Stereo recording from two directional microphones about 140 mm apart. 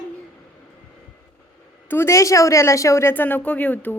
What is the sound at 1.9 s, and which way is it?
A woman's voice, 20° left (ahead or behind).